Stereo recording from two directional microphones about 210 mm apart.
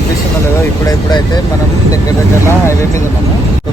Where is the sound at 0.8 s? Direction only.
20° left (ahead or behind).